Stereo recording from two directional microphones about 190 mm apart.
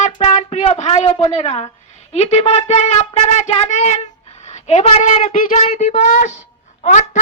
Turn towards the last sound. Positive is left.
turn(degrees=40)  # may be behind; listen again after turning